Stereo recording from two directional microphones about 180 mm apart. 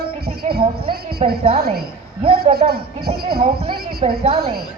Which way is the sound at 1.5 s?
60° right (ahead or behind).